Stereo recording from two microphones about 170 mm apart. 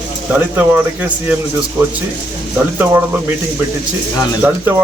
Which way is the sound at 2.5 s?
15° right (ahead or behind).